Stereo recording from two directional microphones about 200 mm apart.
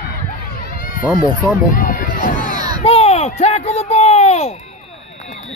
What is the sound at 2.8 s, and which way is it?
Speech, 30° left (ahead or behind).